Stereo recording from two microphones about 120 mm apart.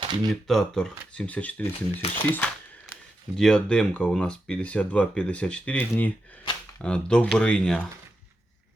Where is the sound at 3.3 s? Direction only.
5° left (ahead or behind).